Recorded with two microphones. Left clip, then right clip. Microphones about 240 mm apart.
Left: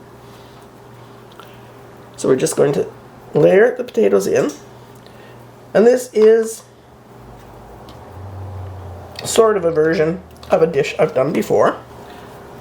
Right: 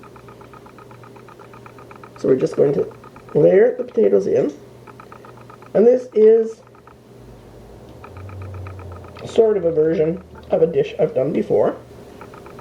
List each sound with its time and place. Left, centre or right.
2.3 s speech: left
5.7 s speech: left
9.3 s speech: left